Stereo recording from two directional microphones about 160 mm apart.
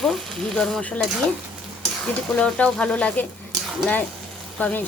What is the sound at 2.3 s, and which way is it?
Speech, 5° left (ahead or behind).